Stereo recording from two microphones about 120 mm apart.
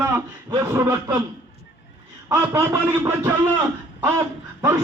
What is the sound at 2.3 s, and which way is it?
Speech, 25° right (ahead or behind).